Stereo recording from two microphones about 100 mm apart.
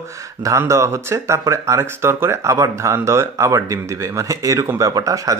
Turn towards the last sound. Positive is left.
turn(degrees=-35)  # may be behind; listen again after turning